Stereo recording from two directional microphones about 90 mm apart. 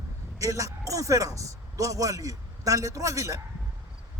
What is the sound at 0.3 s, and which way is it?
Speech, 35° right (ahead or behind).